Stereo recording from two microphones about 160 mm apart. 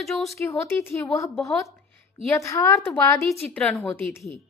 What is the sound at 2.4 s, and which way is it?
Speech, 20° left (ahead or behind).